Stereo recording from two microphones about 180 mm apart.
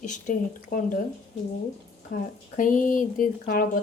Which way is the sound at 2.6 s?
45° left (ahead or behind).